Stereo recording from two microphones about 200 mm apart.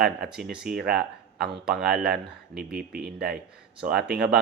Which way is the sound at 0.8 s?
50° right (ahead or behind).